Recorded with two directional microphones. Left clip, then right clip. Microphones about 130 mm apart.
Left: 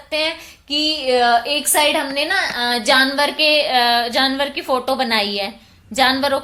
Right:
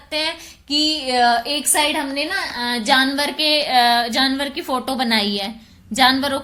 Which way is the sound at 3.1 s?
20° right (ahead or behind).